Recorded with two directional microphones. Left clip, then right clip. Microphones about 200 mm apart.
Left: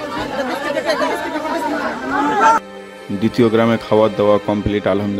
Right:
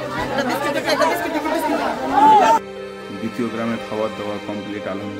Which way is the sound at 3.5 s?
45° left (ahead or behind).